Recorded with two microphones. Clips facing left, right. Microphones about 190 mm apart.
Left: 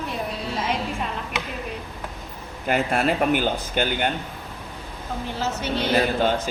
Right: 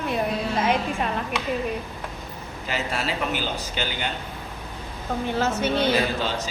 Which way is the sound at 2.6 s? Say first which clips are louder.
Left 7 dB; 55° left (ahead or behind).